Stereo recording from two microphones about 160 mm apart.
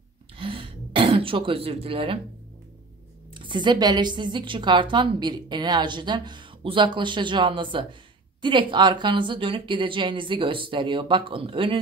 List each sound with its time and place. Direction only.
0.4 s throat clearing: 35° right (ahead or behind)
3.3 s a woman's voice: 30° right (ahead or behind)